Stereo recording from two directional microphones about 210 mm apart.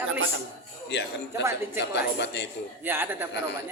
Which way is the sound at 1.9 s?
55° left (ahead or behind).